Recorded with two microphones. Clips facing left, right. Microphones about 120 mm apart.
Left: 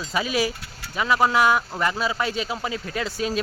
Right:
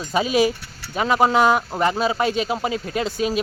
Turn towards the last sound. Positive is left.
turn(degrees=-20)  # may be behind; listen again after turning